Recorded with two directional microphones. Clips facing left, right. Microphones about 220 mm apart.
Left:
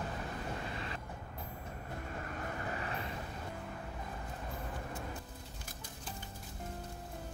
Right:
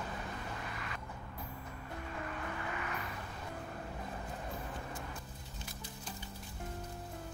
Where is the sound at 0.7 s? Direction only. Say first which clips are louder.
Left 3 dB; 30° left (ahead or behind).